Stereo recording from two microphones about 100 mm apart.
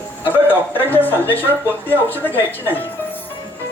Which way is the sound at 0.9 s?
20° left (ahead or behind).